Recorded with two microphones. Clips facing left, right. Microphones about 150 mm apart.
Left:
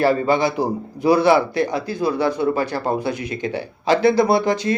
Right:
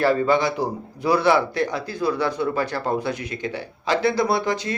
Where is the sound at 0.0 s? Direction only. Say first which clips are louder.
Left 2 dB; 10° left (ahead or behind).